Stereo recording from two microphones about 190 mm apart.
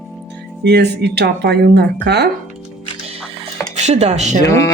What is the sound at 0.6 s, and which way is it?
Speech, 60° right (ahead or behind).